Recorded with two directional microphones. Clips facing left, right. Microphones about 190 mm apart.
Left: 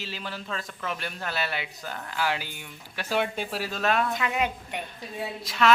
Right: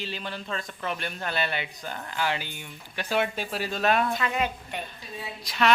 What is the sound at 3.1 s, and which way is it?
Speech, 5° right (ahead or behind).